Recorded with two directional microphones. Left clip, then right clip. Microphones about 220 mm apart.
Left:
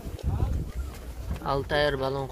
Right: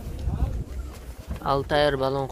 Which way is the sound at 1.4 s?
20° right (ahead or behind).